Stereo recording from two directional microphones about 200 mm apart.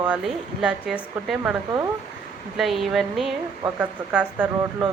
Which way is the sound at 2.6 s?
Centre (ahead or behind).